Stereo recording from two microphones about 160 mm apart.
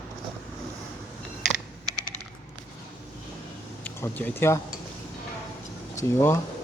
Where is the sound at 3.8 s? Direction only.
10° left (ahead or behind).